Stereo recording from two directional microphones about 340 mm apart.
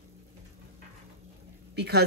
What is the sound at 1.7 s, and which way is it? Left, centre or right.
Speech, right.